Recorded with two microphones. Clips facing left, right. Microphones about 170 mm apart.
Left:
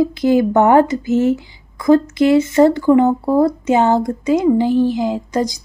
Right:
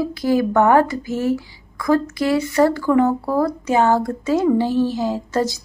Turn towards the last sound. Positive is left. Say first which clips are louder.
# left 2 dB
turn(degrees=15)  # may be behind; listen again after turning